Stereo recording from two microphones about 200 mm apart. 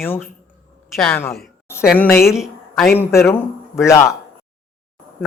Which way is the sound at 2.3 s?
Centre (ahead or behind).